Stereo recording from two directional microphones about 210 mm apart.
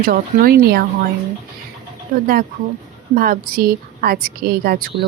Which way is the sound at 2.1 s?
40° right (ahead or behind).